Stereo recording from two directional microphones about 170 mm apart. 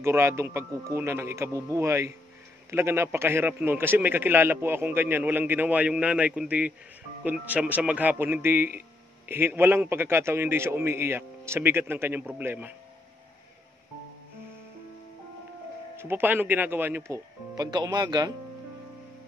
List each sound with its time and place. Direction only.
0.0 s a man's voice: 15° right (ahead or behind)
16.0 s a man's voice: 10° right (ahead or behind)